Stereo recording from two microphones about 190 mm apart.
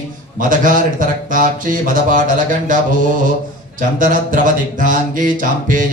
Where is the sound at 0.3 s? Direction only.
45° right (ahead or behind).